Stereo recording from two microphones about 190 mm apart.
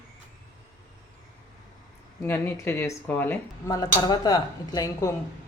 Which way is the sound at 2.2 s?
10° left (ahead or behind).